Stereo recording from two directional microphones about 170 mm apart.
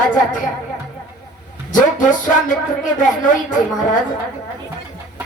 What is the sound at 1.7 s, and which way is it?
Speech, 50° left (ahead or behind).